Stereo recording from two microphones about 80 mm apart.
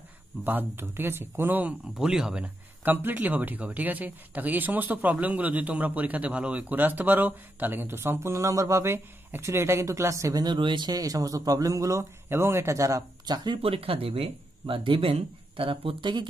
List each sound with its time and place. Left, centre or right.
0.4 s speech: right
2.0 s speech: centre
2.8 s speech: right
10.4 s speech: right
10.9 s speech: right
14.8 s speech: right